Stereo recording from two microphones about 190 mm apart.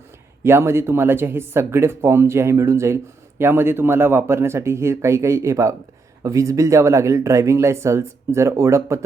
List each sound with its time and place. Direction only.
0.4 s speech: 15° right (ahead or behind)